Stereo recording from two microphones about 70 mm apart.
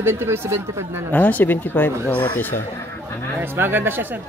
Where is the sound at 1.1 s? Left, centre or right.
Left.